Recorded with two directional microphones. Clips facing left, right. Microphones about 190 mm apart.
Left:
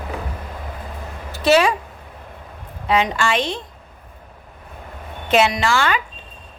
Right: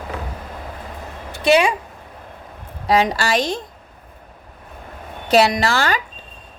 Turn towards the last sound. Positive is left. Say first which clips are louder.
# even
turn(degrees=-40)  # may be behind; listen again after turning